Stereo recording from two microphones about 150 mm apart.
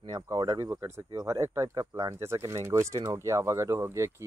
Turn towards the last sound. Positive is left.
turn(degrees=-20)  # may be behind; listen again after turning